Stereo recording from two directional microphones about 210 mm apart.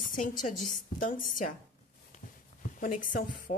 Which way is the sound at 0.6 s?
40° left (ahead or behind).